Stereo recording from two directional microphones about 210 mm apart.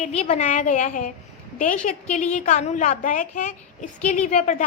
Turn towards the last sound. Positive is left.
turn(degrees=35)  # may be behind; listen again after turning